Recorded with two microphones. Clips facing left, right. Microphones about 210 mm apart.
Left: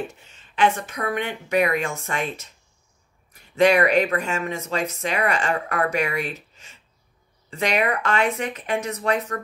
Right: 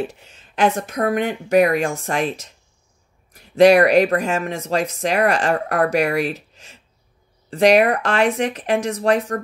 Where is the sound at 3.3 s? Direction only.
35° right (ahead or behind).